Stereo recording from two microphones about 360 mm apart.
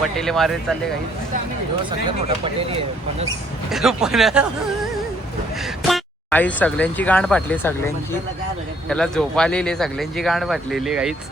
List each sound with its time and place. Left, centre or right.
0.0 s speech: centre
1.8 s speech: centre
3.7 s speech: centre
5.9 s speech: centre